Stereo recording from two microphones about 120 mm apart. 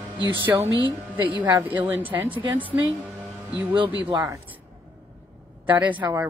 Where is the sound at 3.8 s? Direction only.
45° right (ahead or behind).